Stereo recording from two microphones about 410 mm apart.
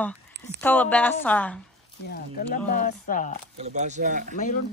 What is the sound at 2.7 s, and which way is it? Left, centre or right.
Speech, centre.